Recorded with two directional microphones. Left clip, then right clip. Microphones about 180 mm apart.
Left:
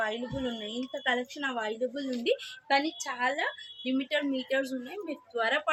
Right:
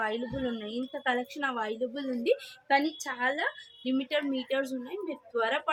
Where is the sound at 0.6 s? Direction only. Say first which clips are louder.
Even; 30° right (ahead or behind).